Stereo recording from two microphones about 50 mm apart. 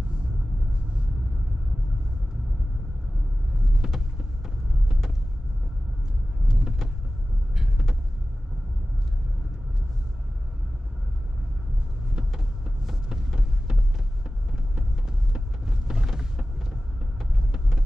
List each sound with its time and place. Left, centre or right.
3.8 s vehicle: centre
6.4 s vehicle: centre
12.6 s a sound: centre
14.5 s vehicle: centre